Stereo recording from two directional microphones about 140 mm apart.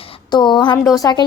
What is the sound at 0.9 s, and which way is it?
Speech, 25° left (ahead or behind).